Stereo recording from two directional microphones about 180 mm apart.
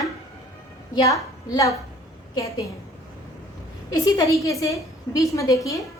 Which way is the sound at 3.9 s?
20° left (ahead or behind).